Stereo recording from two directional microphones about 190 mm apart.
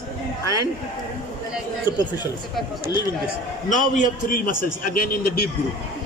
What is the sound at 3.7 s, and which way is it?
A man's voice, 40° left (ahead or behind).